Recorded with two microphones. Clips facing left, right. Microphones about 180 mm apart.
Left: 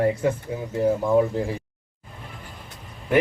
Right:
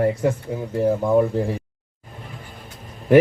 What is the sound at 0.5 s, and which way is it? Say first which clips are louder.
Speech: right 2 dB; 35° right (ahead or behind).